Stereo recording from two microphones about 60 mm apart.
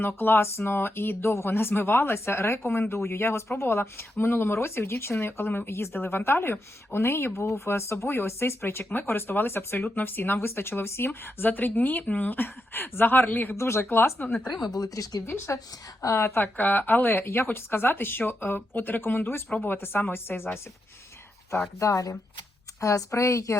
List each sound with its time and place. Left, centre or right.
0.2 s speech: left
13.6 s speech: left
13.9 s speech: left
14.7 s speech: left
15.5 s speech: left
16.0 s speech: left
16.2 s speech: left
16.6 s speech: left
21.8 s speech: left